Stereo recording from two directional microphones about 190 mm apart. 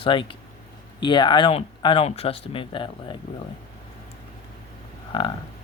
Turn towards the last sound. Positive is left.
turn(degrees=25)  # may be behind; listen again after turning